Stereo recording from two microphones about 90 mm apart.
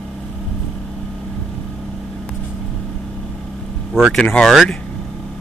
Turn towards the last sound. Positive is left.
turn(degrees=5)  # may be behind; listen again after turning